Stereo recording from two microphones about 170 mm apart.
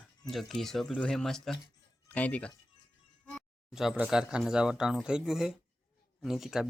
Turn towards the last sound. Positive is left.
turn(degrees=0)  # may be behind; listen again after turning